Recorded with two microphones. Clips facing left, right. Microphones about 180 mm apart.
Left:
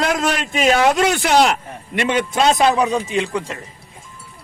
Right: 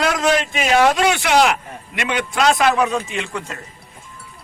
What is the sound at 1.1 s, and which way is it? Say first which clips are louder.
Speech: left 1 dB; 40° left (ahead or behind).